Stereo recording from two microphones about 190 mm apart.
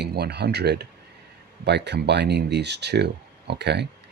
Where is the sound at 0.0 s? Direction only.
60° right (ahead or behind).